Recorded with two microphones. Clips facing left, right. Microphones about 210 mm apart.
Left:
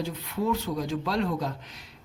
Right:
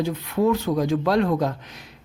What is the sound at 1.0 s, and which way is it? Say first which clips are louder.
Speech: right 8 dB; 55° right (ahead or behind).